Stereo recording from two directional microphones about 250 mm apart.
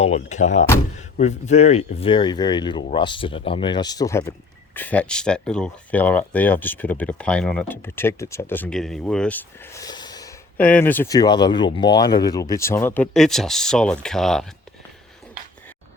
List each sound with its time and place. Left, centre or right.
0.0 s speech: left; by 14.5 s centre